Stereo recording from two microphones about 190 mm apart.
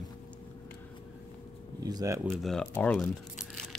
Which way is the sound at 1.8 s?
20° right (ahead or behind).